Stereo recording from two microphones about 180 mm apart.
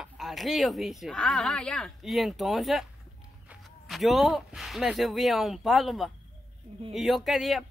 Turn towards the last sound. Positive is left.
turn(degrees=0)  # may be behind; listen again after turning